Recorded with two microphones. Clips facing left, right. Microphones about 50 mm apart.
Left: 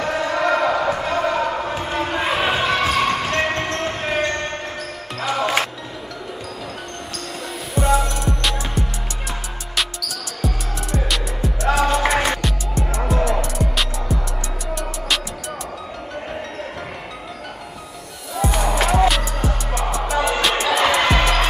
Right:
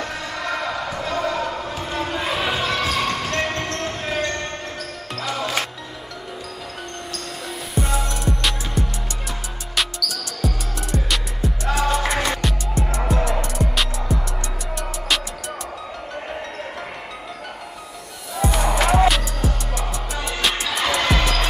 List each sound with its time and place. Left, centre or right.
0.0 s basketball bounce: left
5.2 s music: centre
7.7 s music: centre
18.3 s music: centre